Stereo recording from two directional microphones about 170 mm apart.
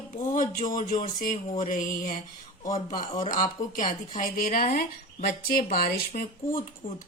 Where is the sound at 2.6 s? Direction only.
25° left (ahead or behind).